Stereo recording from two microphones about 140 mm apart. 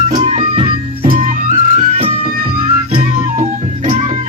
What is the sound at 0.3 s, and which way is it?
Music, 45° right (ahead or behind).